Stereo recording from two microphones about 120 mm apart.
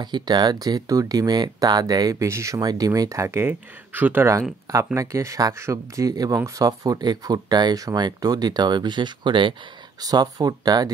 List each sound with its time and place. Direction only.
0.0 s speech: 40° right (ahead or behind)
10.0 s speech: 30° right (ahead or behind)